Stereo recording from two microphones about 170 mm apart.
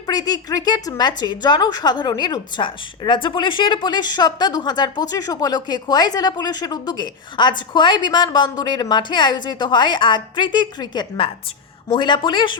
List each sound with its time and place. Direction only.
0.1 s speech: 25° left (ahead or behind)